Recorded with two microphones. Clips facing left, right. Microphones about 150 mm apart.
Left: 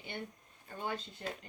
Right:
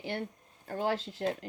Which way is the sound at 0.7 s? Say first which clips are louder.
Right 8 dB; 90° right.